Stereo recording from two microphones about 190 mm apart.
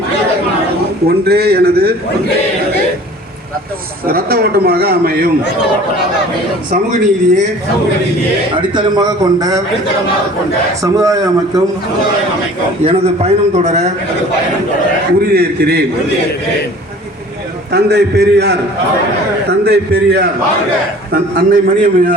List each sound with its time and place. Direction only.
1.0 s a man's voice: 55° right (ahead or behind)
4.0 s a man's voice: 50° right (ahead or behind)
8.7 s a man's voice: 25° right (ahead or behind)
10.8 s a man's voice: 15° right (ahead or behind)
12.8 s a man's voice: 30° right (ahead or behind)
15.2 s a man's voice: 55° right (ahead or behind)
17.7 s a man's voice: 60° right (ahead or behind)
21.1 s a man's voice: 50° right (ahead or behind)